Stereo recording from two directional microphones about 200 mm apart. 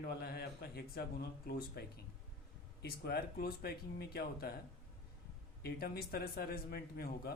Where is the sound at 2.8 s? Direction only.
50° left (ahead or behind).